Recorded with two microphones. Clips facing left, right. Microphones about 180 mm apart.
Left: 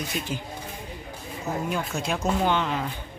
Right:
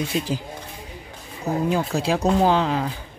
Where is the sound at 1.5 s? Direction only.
35° right (ahead or behind).